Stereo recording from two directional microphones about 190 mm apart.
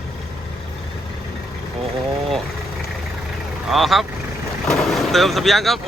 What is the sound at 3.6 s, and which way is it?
Speech, centre (ahead or behind).